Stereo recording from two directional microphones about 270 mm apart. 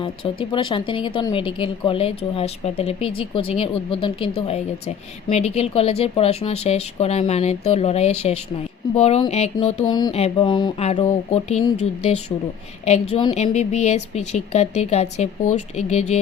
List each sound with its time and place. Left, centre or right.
0.0 s a woman's voice: centre
12.8 s a woman's voice: left